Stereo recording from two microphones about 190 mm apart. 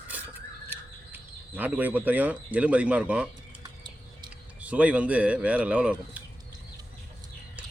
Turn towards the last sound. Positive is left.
turn(degrees=-5)  # may be behind; listen again after turning